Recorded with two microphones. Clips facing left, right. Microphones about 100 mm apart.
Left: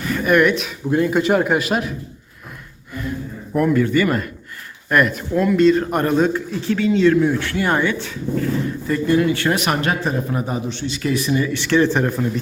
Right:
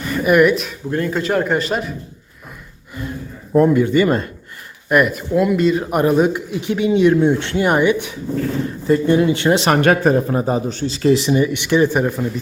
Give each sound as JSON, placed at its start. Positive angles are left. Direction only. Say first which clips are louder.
{"t": 0.0, "sound": "speech", "louder": "right 2 dB", "side_deg": -5}
{"t": 0.9, "sound": "a man's voice", "louder": "left 3 dB", "side_deg": 10}
{"t": 3.5, "sound": "speech", "louder": "right 4 dB", "side_deg": -25}
{"t": 4.9, "sound": "a man's voice", "louder": "right 2 dB", "side_deg": -5}
{"t": 9.8, "sound": "a man's voice", "louder": "right 7 dB", "side_deg": -55}